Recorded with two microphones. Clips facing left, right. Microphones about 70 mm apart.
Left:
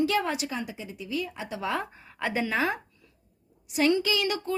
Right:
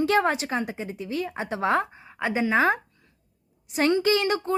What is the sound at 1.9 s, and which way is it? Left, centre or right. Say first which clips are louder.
Speech: right 3 dB; centre.